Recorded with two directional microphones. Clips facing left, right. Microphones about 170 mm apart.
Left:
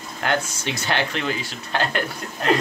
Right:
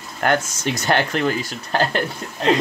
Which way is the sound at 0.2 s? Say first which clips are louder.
Right 4 dB; 45° right (ahead or behind).